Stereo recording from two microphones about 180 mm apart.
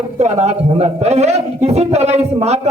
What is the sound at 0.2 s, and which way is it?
A man's voice, 40° right (ahead or behind).